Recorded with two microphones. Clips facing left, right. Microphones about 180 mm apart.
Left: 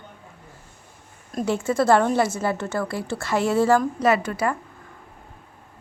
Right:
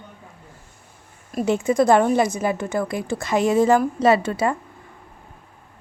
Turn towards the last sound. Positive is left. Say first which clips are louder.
# right 3 dB
turn(degrees=-25)  # may be behind; listen again after turning